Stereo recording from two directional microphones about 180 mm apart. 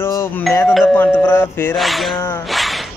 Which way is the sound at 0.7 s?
Centre (ahead or behind).